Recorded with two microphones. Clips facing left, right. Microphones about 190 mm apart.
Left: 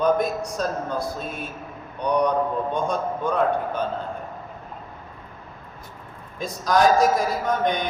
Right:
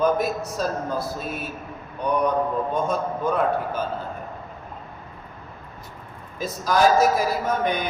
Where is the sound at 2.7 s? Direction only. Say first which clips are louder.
Even; 5° right (ahead or behind).